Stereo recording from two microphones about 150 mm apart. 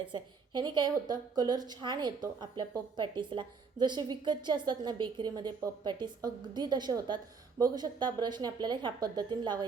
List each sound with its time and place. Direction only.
0.0 s a woman's voice: 30° right (ahead or behind)